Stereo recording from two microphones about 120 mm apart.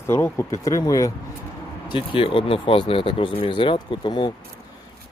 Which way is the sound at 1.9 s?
45° left (ahead or behind).